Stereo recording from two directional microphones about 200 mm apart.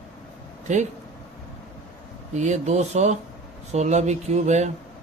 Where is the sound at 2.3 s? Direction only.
35° right (ahead or behind).